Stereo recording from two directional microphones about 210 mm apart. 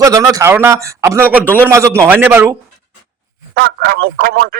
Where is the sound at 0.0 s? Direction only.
15° right (ahead or behind).